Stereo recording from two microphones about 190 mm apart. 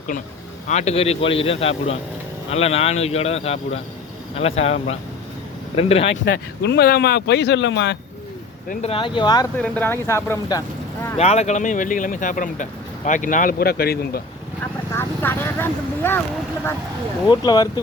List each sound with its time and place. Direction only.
0.7 s speech: 35° left (ahead or behind)
6.2 s speech: 60° left (ahead or behind)
8.7 s speech: 30° left (ahead or behind)
9.6 s speech: 10° left (ahead or behind)
11.2 s speech: 35° left (ahead or behind); by 14.2 s 55° left (ahead or behind)
14.9 s vehicle: 10° left (ahead or behind)
17.2 s speech: 20° left (ahead or behind)